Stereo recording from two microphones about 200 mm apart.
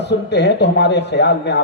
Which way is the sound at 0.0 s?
60° left (ahead or behind).